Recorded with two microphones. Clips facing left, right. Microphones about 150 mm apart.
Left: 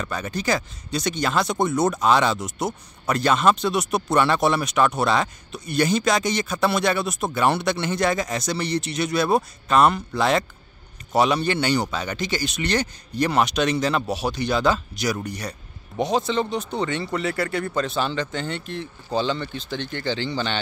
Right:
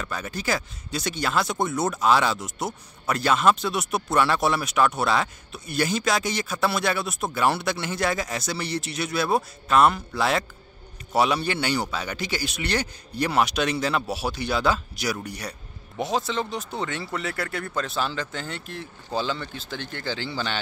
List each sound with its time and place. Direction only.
0.0 s speech: centre (ahead or behind)